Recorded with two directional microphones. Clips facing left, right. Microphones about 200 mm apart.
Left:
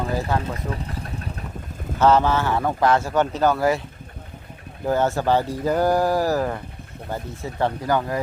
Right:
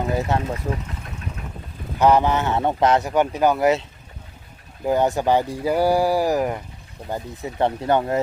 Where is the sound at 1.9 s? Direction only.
15° right (ahead or behind).